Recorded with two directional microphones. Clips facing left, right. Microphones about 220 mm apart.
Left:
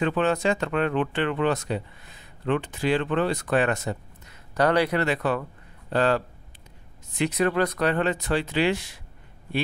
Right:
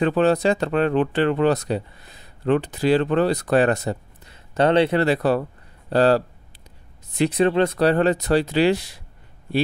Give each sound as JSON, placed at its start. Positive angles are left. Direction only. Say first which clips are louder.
{"t": 0.0, "sound": "speech", "louder": "right 5 dB", "side_deg": -35}